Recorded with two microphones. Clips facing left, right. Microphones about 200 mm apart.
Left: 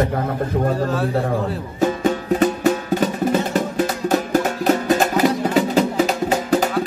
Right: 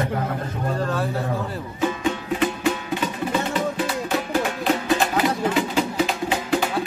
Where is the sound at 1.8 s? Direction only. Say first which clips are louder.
Left 5 dB; 40° left (ahead or behind).